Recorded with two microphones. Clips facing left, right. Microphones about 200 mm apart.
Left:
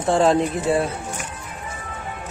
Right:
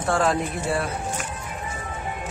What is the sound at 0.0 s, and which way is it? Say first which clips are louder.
Speech: left 5 dB; 25° left (ahead or behind).